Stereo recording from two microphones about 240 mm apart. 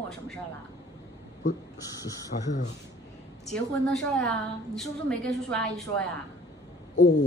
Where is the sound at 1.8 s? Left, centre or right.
Centre.